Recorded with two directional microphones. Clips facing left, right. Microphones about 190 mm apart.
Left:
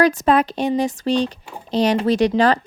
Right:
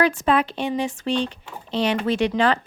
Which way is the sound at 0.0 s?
40° left (ahead or behind).